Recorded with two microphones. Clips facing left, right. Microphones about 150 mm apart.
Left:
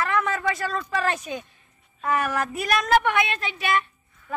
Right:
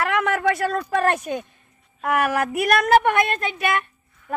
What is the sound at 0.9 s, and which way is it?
Speech, 55° right (ahead or behind).